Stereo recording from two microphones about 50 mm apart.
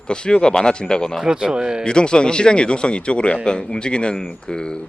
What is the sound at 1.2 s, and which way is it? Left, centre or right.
Speech, centre.